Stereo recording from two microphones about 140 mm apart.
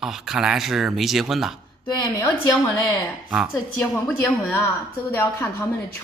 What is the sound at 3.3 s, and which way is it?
Speech, 5° right (ahead or behind).